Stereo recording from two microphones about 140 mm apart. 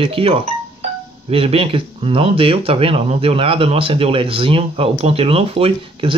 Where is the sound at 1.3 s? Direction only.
40° right (ahead or behind).